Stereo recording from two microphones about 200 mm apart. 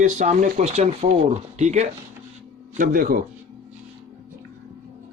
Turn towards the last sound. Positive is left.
turn(degrees=-45)  # may be behind; listen again after turning